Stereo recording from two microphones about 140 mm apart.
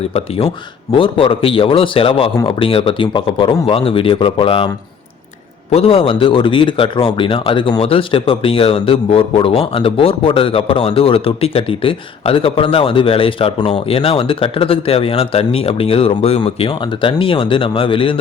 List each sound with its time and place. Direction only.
0.1 s speech: 45° left (ahead or behind)
5.7 s speech: 45° left (ahead or behind)